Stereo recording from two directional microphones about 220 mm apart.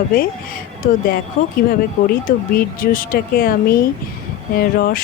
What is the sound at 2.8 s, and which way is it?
Speech, 40° left (ahead or behind).